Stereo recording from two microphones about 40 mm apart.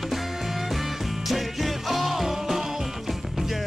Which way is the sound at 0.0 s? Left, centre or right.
Centre.